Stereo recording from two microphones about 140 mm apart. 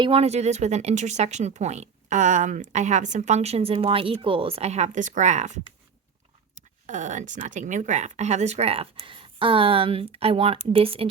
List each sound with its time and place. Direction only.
0.0 s speech: 45° right (ahead or behind)
6.8 s speech: 60° right (ahead or behind); by 11.1 s 40° right (ahead or behind)